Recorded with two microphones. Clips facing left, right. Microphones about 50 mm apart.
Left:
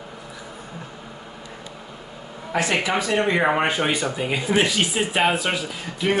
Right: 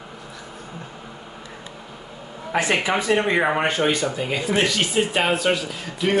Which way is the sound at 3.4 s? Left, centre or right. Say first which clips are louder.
Even; centre.